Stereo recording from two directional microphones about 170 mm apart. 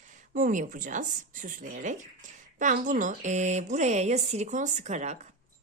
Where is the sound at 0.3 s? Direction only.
50° right (ahead or behind).